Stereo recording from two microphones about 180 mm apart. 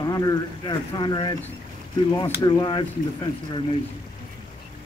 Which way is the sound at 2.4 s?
25° left (ahead or behind).